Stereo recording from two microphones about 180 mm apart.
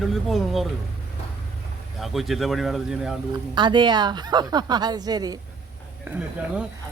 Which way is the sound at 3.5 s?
25° right (ahead or behind).